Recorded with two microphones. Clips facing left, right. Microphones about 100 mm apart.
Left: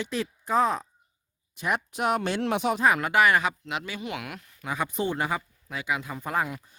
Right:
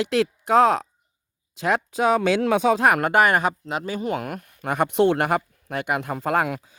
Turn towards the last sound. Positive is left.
turn(degrees=-85)